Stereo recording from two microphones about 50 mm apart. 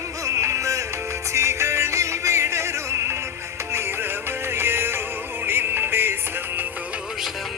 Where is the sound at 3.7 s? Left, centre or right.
Right.